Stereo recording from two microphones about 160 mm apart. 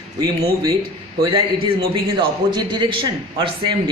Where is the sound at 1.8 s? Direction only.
30° right (ahead or behind).